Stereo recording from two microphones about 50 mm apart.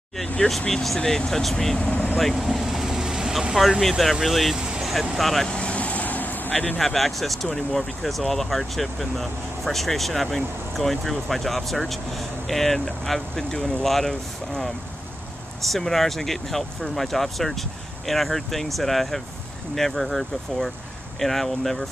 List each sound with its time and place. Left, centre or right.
0.5 s speech: centre
1.8 s speech: left
2.1 s vehicle: centre
3.6 s speech: centre
4.6 s vehicle: centre
5.1 s speech: centre
5.5 s vehicle: left
6.8 s speech: centre